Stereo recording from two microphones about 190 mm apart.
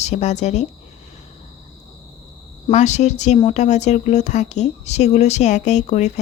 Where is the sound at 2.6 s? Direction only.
35° left (ahead or behind).